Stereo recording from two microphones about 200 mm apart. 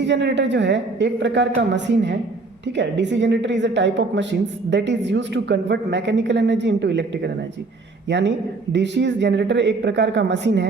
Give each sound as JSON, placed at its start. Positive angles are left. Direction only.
{"t": 0.0, "sound": "a woman's voice", "side_deg": -60}